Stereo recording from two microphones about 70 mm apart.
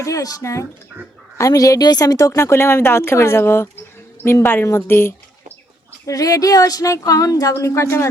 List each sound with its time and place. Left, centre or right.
0.0 s a woman's voice: left
6.1 s speech: left